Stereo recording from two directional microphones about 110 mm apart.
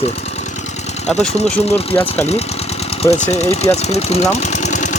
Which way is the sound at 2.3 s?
70° left (ahead or behind).